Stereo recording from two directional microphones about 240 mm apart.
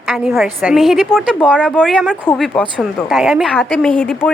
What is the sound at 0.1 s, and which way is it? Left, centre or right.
A woman's voice, centre.